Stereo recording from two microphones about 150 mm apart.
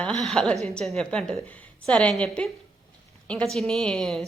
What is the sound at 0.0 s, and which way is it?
A woman's voice, 5° left (ahead or behind).